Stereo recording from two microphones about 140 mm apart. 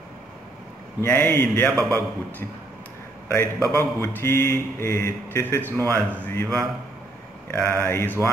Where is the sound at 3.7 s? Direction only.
20° left (ahead or behind).